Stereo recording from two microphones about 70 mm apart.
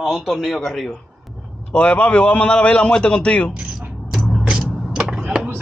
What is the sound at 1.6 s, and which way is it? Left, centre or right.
A man's voice, centre.